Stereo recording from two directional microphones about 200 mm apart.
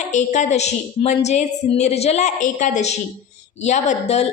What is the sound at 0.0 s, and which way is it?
A woman's voice, 35° left (ahead or behind).